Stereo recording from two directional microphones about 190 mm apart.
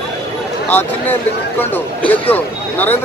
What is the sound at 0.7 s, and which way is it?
Speech, 10° left (ahead or behind).